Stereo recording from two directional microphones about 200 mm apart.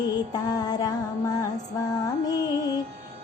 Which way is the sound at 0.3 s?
20° left (ahead or behind).